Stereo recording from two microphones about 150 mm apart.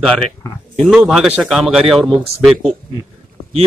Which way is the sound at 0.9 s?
5° right (ahead or behind).